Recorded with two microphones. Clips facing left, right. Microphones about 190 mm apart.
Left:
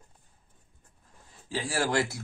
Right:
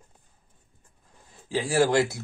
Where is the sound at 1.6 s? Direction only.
20° right (ahead or behind).